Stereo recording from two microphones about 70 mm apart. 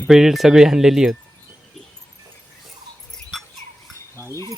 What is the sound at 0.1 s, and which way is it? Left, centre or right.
Speech, centre.